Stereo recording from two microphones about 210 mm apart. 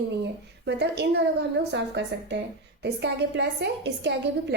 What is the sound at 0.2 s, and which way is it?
A woman's voice, 55° right (ahead or behind).